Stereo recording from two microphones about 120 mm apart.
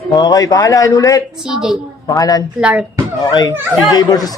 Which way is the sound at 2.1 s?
30° left (ahead or behind).